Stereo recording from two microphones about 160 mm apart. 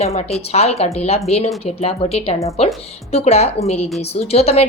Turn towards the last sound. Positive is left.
turn(degrees=40)  # may be behind; listen again after turning